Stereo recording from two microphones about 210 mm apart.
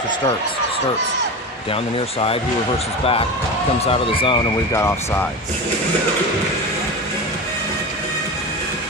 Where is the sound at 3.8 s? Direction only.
25° left (ahead or behind).